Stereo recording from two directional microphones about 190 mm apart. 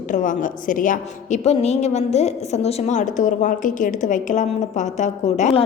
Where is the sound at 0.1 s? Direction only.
45° left (ahead or behind).